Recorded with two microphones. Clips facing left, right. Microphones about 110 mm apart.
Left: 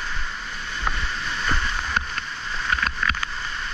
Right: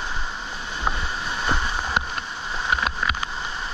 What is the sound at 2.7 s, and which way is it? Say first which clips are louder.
Boat: right 1 dB; 15° right (ahead or behind).